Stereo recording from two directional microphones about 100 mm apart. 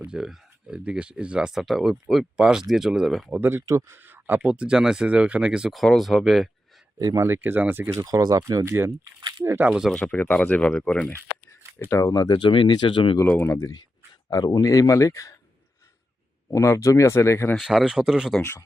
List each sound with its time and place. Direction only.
0.0 s speech: 10° right (ahead or behind)
3.3 s speech: 25° right (ahead or behind); by 6.5 s centre (ahead or behind)
7.0 s speech: 35° right (ahead or behind)
7.3 s speech: 20° right (ahead or behind)
7.9 s speech: 40° right (ahead or behind)
9.6 s speech: 5° right (ahead or behind)
9.9 s speech: 15° left (ahead or behind)
11.9 s speech: 30° left (ahead or behind); by 13.1 s 55° left (ahead or behind)
13.2 s speech: 20° left (ahead or behind)
14.3 s speech: 40° left (ahead or behind)
16.5 s speech: 30° left (ahead or behind)
17.6 s speech: 5° right (ahead or behind)